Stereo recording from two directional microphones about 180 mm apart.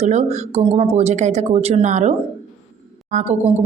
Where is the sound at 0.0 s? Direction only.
35° right (ahead or behind).